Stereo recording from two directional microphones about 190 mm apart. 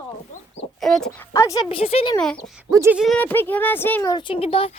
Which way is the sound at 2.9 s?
5° left (ahead or behind).